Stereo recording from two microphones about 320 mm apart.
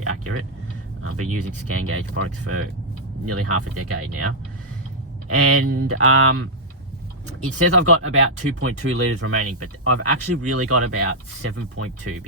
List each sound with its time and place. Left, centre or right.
0.0 s vehicle: right
1.0 s speech: right
5.3 s speech: right